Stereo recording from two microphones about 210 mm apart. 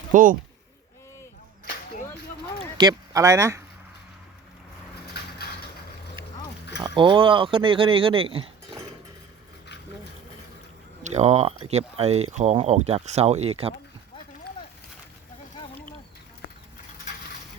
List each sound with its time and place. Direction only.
0.1 s speech: 40° right (ahead or behind)
2.7 s speech: 20° right (ahead or behind)
5.2 s a sound: 50° left (ahead or behind)
6.8 s speech: 20° right (ahead or behind)
11.0 s speech: 30° right (ahead or behind)